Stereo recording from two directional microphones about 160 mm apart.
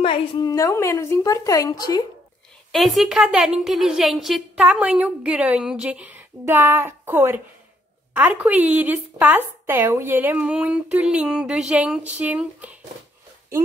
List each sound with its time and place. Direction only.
0.0 s a woman's voice: 35° left (ahead or behind)
0.5 s speech: 20° left (ahead or behind)
2.7 s a woman's voice: centre (ahead or behind)